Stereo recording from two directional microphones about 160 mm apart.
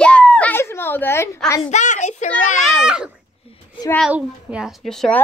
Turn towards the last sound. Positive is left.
turn(degrees=0)  # may be behind; listen again after turning